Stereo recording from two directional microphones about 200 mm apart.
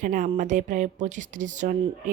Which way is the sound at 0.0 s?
40° right (ahead or behind).